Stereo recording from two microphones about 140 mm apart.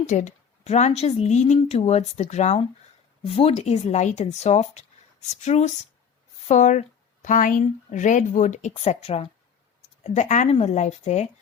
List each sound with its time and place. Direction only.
0.1 s a woman's voice: 60° left (ahead or behind)